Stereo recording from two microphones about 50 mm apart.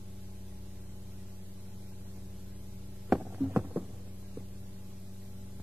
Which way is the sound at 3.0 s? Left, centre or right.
Right.